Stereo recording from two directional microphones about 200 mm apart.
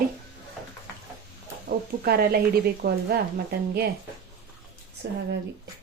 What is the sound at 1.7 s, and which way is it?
Speech, 50° right (ahead or behind).